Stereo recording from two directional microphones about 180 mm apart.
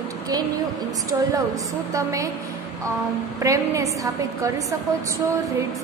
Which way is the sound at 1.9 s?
20° right (ahead or behind).